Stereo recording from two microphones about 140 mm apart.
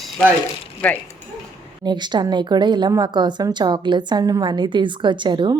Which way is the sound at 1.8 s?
30° right (ahead or behind).